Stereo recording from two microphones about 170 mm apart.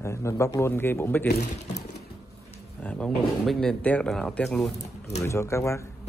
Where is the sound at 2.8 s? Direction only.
5° left (ahead or behind).